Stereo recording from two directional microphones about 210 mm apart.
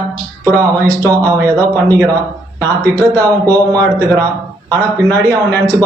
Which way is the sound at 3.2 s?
15° right (ahead or behind).